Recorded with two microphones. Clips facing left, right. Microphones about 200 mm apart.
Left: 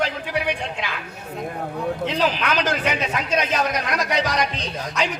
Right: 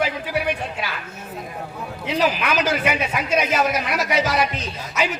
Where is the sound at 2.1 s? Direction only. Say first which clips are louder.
Right 5 dB; 10° right (ahead or behind).